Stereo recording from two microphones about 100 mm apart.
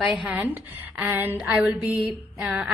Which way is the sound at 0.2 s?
15° right (ahead or behind).